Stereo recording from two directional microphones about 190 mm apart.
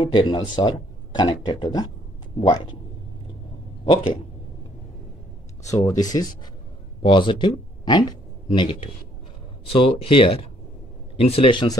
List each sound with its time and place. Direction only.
0.0 s a man's voice: 25° left (ahead or behind)
5.6 s a man's voice: 15° left (ahead or behind)